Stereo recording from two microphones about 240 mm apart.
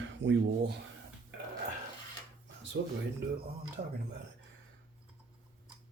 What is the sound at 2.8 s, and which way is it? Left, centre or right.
Speech, right.